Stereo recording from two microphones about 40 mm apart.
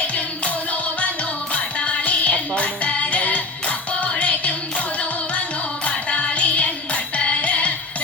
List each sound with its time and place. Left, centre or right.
0.1 s music: left
5.8 s music: left